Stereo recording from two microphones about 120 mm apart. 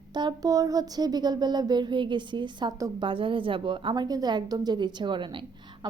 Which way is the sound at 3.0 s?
45° right (ahead or behind).